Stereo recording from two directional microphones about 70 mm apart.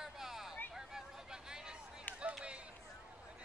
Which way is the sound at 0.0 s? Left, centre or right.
Centre.